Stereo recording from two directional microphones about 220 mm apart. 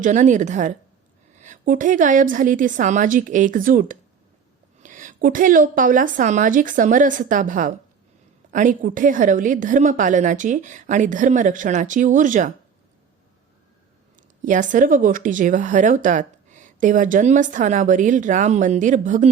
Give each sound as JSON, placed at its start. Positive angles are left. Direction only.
{"t": 0.0, "sound": "speech", "side_deg": -35}
{"t": 14.2, "sound": "speech", "side_deg": -35}